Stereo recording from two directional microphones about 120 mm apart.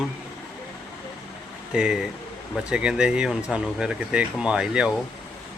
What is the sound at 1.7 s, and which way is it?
Speech, 5° right (ahead or behind).